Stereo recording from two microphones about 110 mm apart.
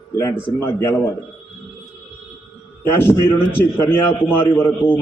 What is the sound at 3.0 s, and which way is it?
A man's voice, 20° left (ahead or behind).